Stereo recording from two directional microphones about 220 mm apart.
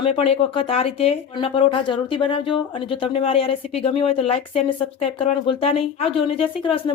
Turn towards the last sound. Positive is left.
turn(degrees=25)  # may be behind; listen again after turning